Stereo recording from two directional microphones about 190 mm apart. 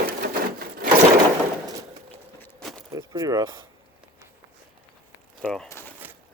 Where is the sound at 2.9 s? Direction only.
20° right (ahead or behind).